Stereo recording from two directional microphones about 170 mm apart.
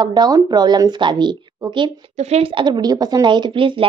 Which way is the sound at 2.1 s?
40° right (ahead or behind).